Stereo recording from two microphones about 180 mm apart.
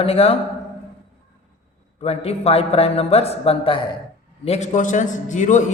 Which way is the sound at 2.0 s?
35° left (ahead or behind).